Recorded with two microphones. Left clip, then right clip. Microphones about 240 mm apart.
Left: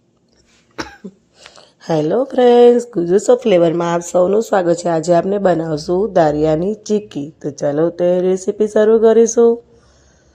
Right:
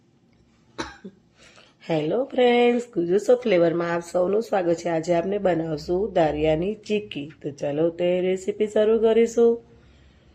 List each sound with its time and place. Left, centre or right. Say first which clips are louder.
0.8 s cough: left 6 dB; left
1.5 s speech: left 8 dB; left
9.0 s speech: left 9 dB; centre